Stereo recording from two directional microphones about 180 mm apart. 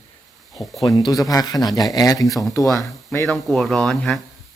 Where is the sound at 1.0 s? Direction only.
20° left (ahead or behind).